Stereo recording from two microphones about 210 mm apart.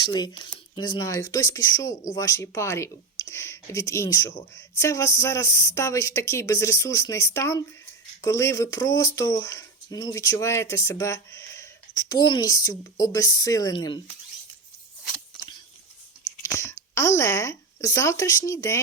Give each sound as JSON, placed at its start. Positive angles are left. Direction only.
{"t": 0.0, "sound": "speech", "side_deg": 20}
{"t": 16.6, "sound": "speech", "side_deg": 10}